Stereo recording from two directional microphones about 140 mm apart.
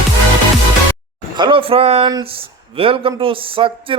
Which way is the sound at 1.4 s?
35° right (ahead or behind).